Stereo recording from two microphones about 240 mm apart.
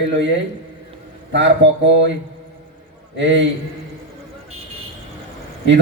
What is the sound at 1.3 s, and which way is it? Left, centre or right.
Speech, right.